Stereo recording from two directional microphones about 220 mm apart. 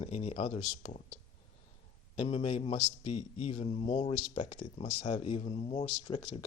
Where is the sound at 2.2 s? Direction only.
25° left (ahead or behind).